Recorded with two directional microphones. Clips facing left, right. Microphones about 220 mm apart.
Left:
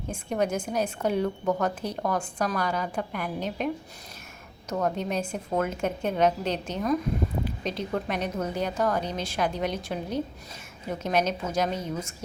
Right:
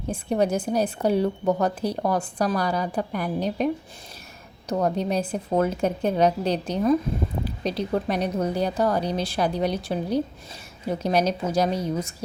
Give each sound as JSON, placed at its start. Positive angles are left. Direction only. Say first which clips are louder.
{"t": 0.1, "sound": "a woman's voice", "louder": "right 4 dB", "side_deg": -35}
{"t": 4.7, "sound": "a woman's voice", "louder": "right 4 dB", "side_deg": -35}